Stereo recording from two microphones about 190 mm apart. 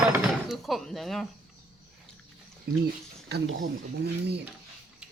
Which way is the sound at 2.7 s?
55° right (ahead or behind).